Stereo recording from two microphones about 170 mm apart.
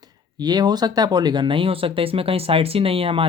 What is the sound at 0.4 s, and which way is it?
Speech, 25° right (ahead or behind).